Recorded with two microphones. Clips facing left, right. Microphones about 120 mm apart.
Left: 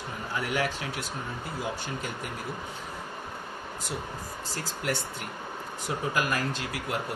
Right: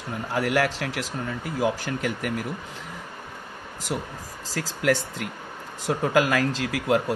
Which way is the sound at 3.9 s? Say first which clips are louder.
Right 6 dB; 90° right.